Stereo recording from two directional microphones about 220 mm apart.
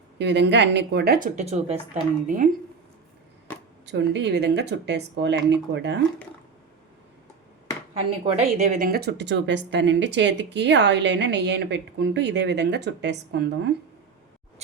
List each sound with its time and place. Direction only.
0.2 s speech: 50° right (ahead or behind); by 2.5 s 35° right (ahead or behind)
3.8 s speech: 55° right (ahead or behind)
8.4 s speech: 35° right (ahead or behind); by 13.7 s 50° right (ahead or behind)